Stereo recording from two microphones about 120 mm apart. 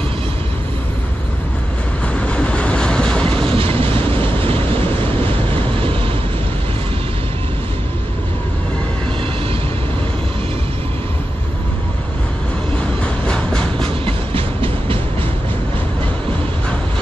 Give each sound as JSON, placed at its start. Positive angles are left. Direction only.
{"t": 2.1, "sound": "train", "side_deg": 10}
{"t": 3.4, "sound": "train", "side_deg": -50}
{"t": 4.1, "sound": "vehicle", "side_deg": -50}
{"t": 12.7, "sound": "train", "side_deg": 10}
{"t": 13.8, "sound": "train", "side_deg": -50}